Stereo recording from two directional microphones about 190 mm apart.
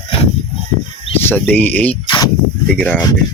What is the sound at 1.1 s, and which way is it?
Speech, 10° left (ahead or behind).